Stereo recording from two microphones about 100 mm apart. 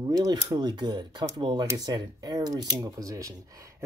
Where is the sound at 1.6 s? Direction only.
40° right (ahead or behind).